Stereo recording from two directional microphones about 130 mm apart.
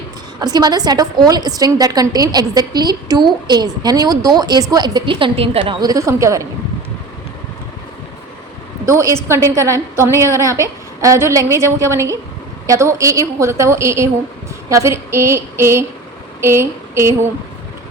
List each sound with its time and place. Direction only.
0.3 s a woman's voice: 30° right (ahead or behind)
8.9 s a woman's voice: 25° right (ahead or behind)
16.4 s a sound: 20° right (ahead or behind)